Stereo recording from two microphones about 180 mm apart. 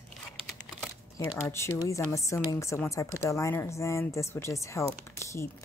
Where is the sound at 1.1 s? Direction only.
15° left (ahead or behind).